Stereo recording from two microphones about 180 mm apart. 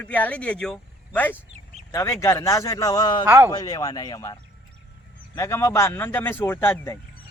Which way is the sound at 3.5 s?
20° left (ahead or behind).